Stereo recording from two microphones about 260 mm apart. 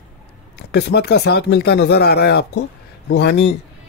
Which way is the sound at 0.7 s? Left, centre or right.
Left.